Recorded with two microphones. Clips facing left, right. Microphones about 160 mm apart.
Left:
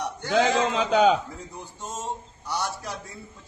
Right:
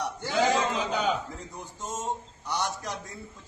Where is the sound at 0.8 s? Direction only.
90° left.